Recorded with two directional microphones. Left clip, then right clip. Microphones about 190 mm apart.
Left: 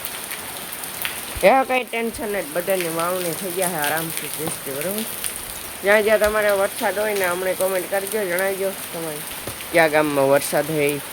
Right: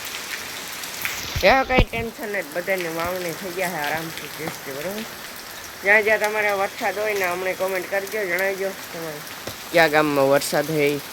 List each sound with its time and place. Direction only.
1.4 s speech: 10° left (ahead or behind)
1.6 s speech: centre (ahead or behind)
1.9 s speech: 20° left (ahead or behind)
5.8 s speech: 20° left (ahead or behind)
9.7 s speech: 5° right (ahead or behind)